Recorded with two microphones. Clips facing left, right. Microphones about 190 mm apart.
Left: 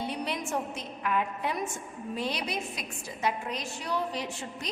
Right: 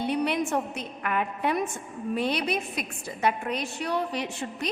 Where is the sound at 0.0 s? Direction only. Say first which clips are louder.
Right 7 dB; 65° right (ahead or behind).